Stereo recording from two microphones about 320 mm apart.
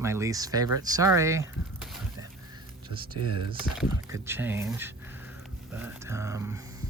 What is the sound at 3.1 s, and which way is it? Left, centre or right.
Speech, right.